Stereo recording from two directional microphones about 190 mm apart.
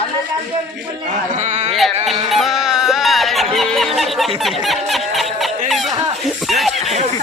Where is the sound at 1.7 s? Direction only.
Centre (ahead or behind).